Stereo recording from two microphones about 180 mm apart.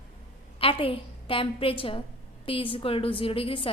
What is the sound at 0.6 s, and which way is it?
A woman's voice, 30° left (ahead or behind).